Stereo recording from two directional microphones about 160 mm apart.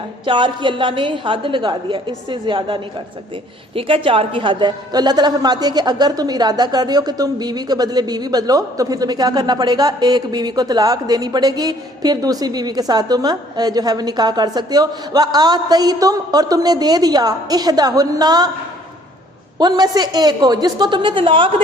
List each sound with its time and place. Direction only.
0.3 s a woman's voice: 30° right (ahead or behind)
3.8 s a woman's voice: 35° right (ahead or behind)
19.5 s a woman's voice: 25° right (ahead or behind)